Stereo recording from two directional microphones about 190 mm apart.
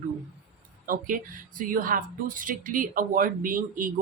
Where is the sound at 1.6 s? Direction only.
45° right (ahead or behind).